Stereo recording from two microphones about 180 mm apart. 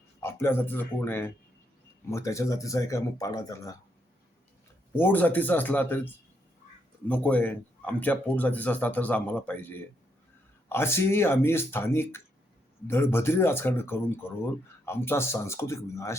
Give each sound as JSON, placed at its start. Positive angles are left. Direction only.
{"t": 0.2, "sound": "speech", "side_deg": 15}
{"t": 4.9, "sound": "speech", "side_deg": 10}
{"t": 7.1, "sound": "speech", "side_deg": 10}